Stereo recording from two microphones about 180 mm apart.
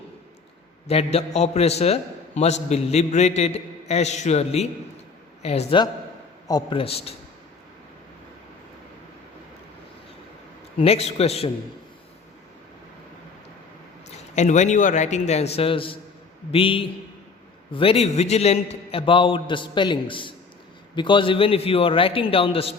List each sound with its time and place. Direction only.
0.9 s a man's voice: 35° left (ahead or behind)
10.8 s a man's voice: 35° left (ahead or behind)
14.3 s a man's voice: 40° left (ahead or behind)